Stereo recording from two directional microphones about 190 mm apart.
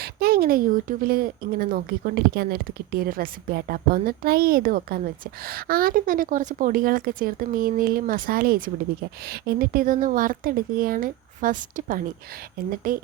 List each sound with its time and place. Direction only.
0.0 s speech: 55° right (ahead or behind)